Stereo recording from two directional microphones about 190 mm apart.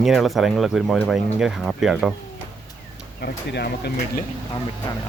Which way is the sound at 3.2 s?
55° left (ahead or behind).